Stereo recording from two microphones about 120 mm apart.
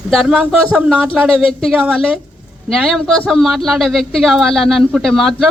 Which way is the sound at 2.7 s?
Centre (ahead or behind).